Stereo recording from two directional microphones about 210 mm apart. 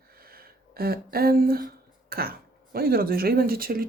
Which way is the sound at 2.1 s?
45° right (ahead or behind).